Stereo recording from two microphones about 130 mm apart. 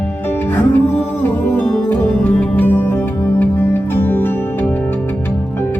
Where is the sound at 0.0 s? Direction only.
15° left (ahead or behind).